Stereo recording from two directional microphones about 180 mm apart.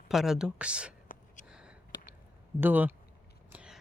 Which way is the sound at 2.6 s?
10° right (ahead or behind).